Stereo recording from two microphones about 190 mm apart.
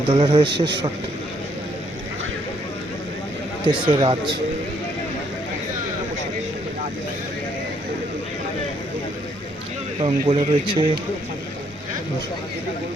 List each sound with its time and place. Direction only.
0.1 s speech: 25° right (ahead or behind)
3.7 s speech: 25° right (ahead or behind)
10.0 s speech: 25° right (ahead or behind)